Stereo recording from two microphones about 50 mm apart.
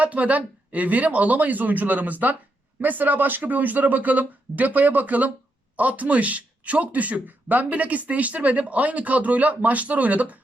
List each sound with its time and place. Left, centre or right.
0.0 s speech: right